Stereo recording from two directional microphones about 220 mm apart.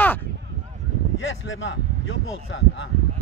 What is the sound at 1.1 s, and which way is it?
Speech, 60° left (ahead or behind).